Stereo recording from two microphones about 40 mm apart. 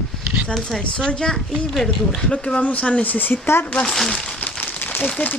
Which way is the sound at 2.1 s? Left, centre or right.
Left.